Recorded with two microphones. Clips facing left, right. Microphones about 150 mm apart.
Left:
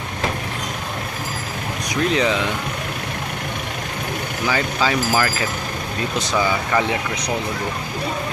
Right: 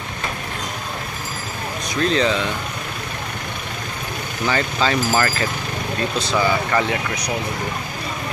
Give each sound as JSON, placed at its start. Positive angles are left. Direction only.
{"t": 2.0, "sound": "speech", "side_deg": 15}
{"t": 4.5, "sound": "speech", "side_deg": 10}